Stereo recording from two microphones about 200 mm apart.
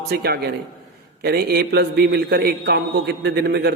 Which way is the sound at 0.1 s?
55° right (ahead or behind).